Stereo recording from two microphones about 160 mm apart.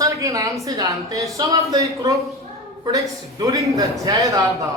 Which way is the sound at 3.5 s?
20° right (ahead or behind).